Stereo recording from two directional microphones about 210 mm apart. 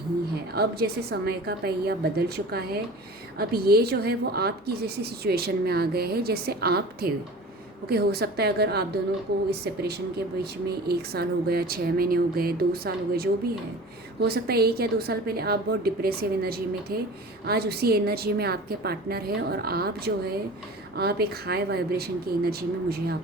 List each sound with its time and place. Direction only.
0.5 s a woman's voice: 50° right (ahead or behind)